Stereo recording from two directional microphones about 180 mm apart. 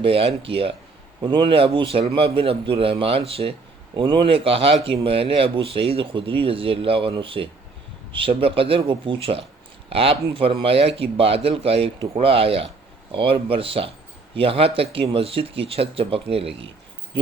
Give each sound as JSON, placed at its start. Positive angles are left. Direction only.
{"t": 0.0, "sound": "speech", "side_deg": -30}